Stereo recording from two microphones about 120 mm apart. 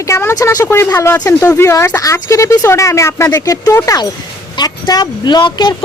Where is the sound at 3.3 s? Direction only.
30° left (ahead or behind).